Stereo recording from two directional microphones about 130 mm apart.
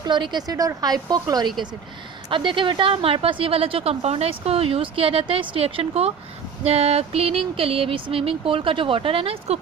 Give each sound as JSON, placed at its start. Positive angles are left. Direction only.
{"t": 0.0, "sound": "speech", "side_deg": -35}